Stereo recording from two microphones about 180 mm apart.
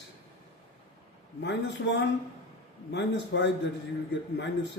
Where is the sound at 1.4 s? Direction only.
75° left (ahead or behind).